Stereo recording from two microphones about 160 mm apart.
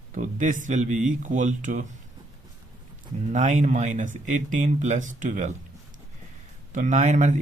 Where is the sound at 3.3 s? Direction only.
50° right (ahead or behind).